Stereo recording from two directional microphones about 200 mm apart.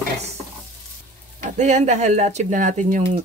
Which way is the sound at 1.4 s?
35° right (ahead or behind).